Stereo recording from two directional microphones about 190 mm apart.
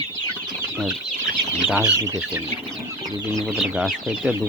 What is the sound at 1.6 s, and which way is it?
Speech, 5° right (ahead or behind).